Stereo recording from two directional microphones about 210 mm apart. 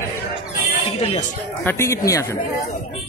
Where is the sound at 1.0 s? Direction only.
30° left (ahead or behind).